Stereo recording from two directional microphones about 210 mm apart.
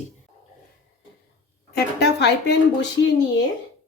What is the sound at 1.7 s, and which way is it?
Speech, 50° left (ahead or behind).